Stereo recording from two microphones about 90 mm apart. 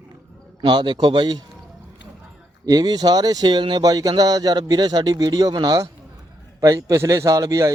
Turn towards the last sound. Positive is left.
turn(degrees=-40)  # may be behind; listen again after turning